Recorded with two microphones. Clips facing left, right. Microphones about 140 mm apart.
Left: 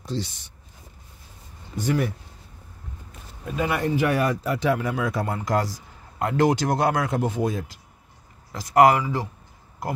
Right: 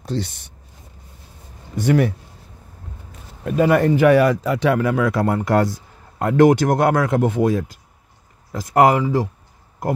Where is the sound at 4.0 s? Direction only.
90° right; by 7.7 s 60° right (ahead or behind).